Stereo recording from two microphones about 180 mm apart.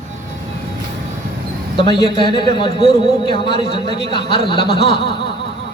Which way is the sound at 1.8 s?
25° left (ahead or behind).